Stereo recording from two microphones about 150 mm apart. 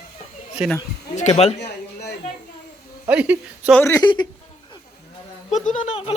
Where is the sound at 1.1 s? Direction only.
50° left (ahead or behind).